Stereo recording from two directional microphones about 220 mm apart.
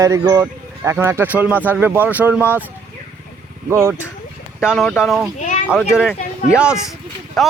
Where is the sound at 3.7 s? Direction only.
10° right (ahead or behind).